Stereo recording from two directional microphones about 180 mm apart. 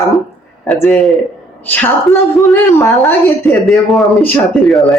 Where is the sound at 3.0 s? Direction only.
5° left (ahead or behind).